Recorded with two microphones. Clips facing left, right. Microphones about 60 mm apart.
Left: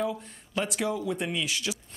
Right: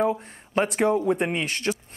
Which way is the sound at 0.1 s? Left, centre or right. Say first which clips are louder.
Right 7 dB; right.